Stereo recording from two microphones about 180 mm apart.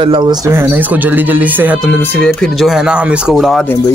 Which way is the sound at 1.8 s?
10° left (ahead or behind).